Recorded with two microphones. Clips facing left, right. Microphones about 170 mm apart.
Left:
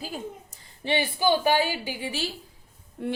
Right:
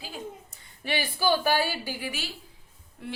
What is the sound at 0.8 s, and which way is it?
A woman's voice, 25° left (ahead or behind).